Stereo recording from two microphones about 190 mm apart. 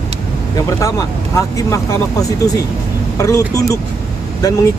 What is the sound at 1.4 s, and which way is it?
Speech, 15° left (ahead or behind).